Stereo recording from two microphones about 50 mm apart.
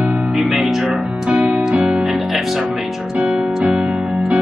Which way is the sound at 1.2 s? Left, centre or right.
Centre.